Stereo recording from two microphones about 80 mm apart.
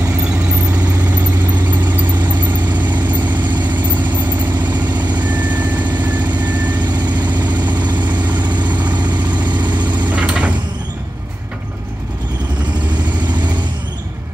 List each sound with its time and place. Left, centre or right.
5.1 s vehicle: centre
7.6 s vehicle: right
9.5 s vehicle: right
10.0 s a sound: centre